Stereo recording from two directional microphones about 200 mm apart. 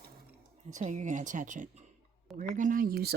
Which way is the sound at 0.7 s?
40° right (ahead or behind).